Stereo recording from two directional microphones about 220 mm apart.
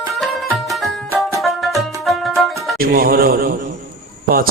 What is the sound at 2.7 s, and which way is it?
Speech, 40° right (ahead or behind).